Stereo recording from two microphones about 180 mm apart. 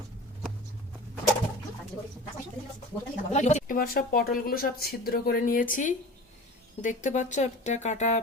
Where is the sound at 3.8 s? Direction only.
55° left (ahead or behind); by 8.2 s 40° left (ahead or behind).